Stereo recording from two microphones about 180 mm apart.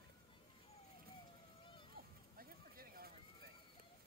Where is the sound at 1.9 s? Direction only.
55° right (ahead or behind).